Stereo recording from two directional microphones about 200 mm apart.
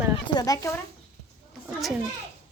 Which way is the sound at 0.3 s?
20° left (ahead or behind).